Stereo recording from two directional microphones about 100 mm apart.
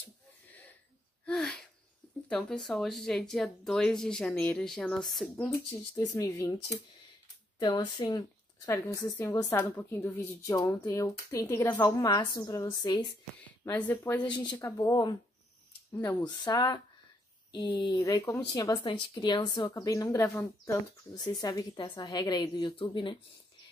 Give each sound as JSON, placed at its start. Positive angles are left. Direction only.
{"t": 0.0, "sound": "a sound", "side_deg": 15}
{"t": 2.2, "sound": "speech", "side_deg": 10}
{"t": 5.9, "sound": "a woman's voice", "side_deg": 35}
{"t": 7.5, "sound": "a woman's voice", "side_deg": 45}
{"t": 8.6, "sound": "a woman's voice", "side_deg": 30}
{"t": 10.4, "sound": "a woman's voice", "side_deg": 35}
{"t": 13.7, "sound": "speech", "side_deg": 20}
{"t": 14.2, "sound": "a woman's voice", "side_deg": 45}
{"t": 16.2, "sound": "a woman's voice", "side_deg": 45}
{"t": 17.9, "sound": "a woman's voice", "side_deg": 30}
{"t": 18.9, "sound": "a woman's voice", "side_deg": 55}
{"t": 20.2, "sound": "a woman's voice", "side_deg": 20}
{"t": 21.1, "sound": "a woman's voice", "side_deg": 45}